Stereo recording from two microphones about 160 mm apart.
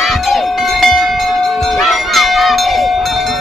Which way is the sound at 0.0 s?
Centre (ahead or behind).